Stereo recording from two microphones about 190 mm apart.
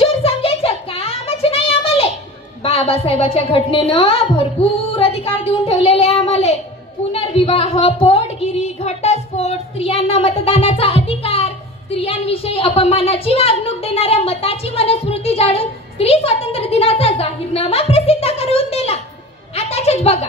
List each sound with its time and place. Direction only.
0.0 s a sound: 30° left (ahead or behind)
2.6 s a woman's voice: 30° left (ahead or behind)
19.5 s music: 35° left (ahead or behind)